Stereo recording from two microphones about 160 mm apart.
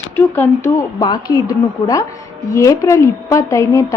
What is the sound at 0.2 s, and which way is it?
A woman's voice, 15° left (ahead or behind).